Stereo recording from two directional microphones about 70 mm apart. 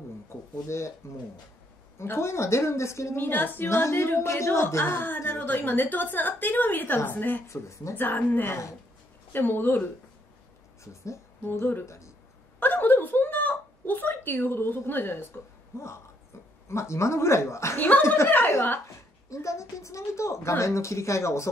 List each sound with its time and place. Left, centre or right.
0.3 s speech: left
2.0 s a woman's voice: left
3.2 s a woman's voice: left
7.4 s speech: left
7.9 s a woman's voice: left
10.8 s speech: left
11.5 s a woman's voice: left
11.8 s speech: left
12.5 s a sound: left
15.7 s a woman's voice: left
17.7 s a woman's voice: left
18.0 s a woman's voice: left
19.2 s speech: left